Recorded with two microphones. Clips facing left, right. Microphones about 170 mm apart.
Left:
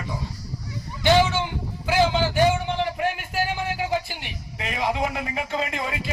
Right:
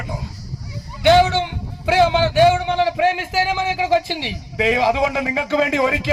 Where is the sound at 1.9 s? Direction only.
70° right (ahead or behind).